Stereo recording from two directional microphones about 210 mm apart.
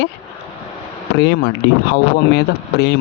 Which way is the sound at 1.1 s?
55° left (ahead or behind).